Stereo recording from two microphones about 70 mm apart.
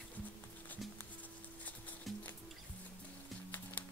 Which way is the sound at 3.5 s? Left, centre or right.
Left.